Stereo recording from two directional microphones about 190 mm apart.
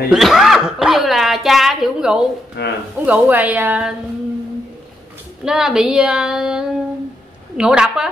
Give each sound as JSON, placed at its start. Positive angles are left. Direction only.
{"t": 0.1, "sound": "speech", "side_deg": 0}
{"t": 2.6, "sound": "speech", "side_deg": 60}
{"t": 3.1, "sound": "a woman's voice", "side_deg": -10}
{"t": 5.4, "sound": "child singing", "side_deg": -5}